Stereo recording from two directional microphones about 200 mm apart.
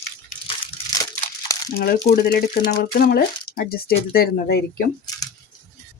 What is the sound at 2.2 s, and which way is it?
Speech, 50° left (ahead or behind).